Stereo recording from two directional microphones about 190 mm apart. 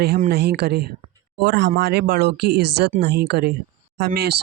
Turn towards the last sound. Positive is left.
turn(degrees=-55)  # may be behind; listen again after turning